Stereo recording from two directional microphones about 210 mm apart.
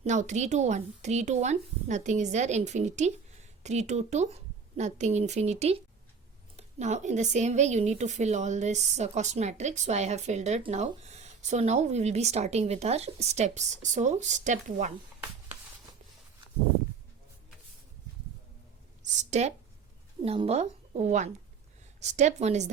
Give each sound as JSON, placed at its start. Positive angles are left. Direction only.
{"t": 0.0, "sound": "speech", "side_deg": -35}
{"t": 19.2, "sound": "speech", "side_deg": -30}